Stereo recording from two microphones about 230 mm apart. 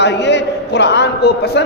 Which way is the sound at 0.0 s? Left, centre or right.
Left.